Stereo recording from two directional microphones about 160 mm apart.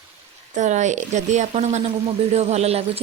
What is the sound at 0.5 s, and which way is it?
A woman's voice, 50° right (ahead or behind).